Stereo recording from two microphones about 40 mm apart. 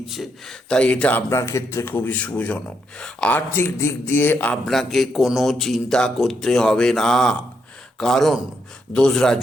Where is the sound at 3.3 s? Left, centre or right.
Left.